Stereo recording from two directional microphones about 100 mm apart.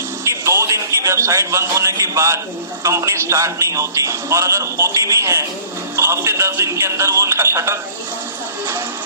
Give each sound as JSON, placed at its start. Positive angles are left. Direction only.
{"t": 0.3, "sound": "a man's voice", "side_deg": -30}